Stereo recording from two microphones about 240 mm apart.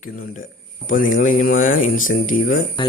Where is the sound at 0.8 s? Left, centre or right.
Left.